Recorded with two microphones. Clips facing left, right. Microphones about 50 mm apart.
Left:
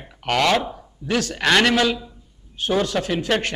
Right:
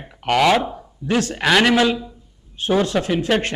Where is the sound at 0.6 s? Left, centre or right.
Centre.